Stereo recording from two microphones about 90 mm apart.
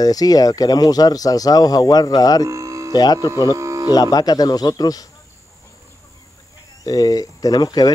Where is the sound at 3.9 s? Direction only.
45° left (ahead or behind).